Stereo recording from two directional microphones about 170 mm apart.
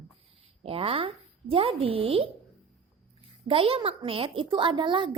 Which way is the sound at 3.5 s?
35° right (ahead or behind).